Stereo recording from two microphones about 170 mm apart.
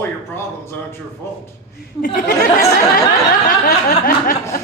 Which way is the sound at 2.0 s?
55° left (ahead or behind).